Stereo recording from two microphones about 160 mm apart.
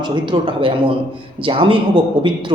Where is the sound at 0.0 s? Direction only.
30° right (ahead or behind).